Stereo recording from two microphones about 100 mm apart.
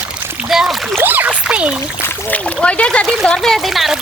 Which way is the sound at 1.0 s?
20° right (ahead or behind).